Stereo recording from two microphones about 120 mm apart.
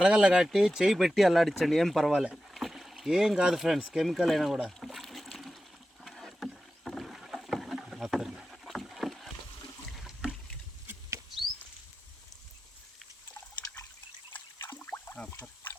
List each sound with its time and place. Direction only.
0.0 s speech: 5° right (ahead or behind)
6.0 s rowboat: centre (ahead or behind)
9.9 s boat: centre (ahead or behind)
14.6 s a sound: 20° left (ahead or behind)